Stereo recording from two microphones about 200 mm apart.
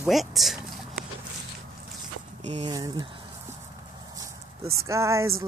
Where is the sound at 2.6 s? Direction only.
20° right (ahead or behind).